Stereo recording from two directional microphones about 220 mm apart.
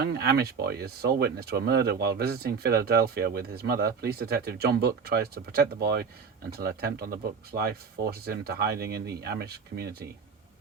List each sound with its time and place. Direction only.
0.0 s speech: 45° right (ahead or behind)